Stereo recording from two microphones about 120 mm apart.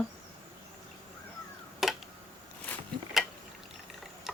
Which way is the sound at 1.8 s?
Centre (ahead or behind).